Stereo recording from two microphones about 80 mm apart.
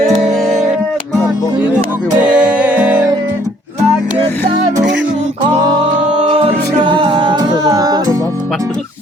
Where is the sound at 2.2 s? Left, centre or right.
Centre.